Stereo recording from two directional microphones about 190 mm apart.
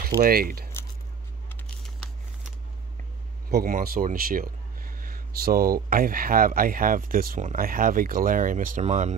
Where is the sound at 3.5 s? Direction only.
50° right (ahead or behind).